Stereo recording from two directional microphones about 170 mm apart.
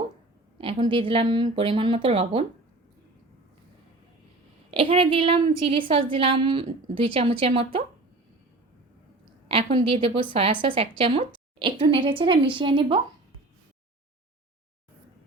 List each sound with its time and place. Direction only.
0.6 s a woman's voice: 30° right (ahead or behind)
4.7 s a woman's voice: 30° right (ahead or behind)
9.5 s a woman's voice: 35° right (ahead or behind)